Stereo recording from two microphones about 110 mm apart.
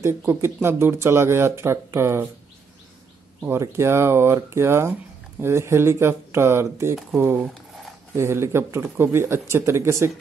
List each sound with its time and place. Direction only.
0.0 s speech: 20° right (ahead or behind)
3.4 s speech: 25° right (ahead or behind)